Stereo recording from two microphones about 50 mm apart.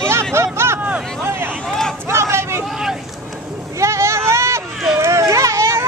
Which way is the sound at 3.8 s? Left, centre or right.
Right.